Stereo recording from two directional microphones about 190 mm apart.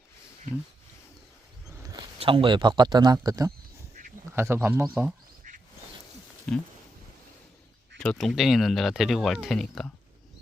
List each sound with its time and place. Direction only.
1.8 s a man's voice: 25° right (ahead or behind)
5.5 s a sound: 45° right (ahead or behind)
6.5 s speech: 5° left (ahead or behind)
7.9 s speech: 5° left (ahead or behind)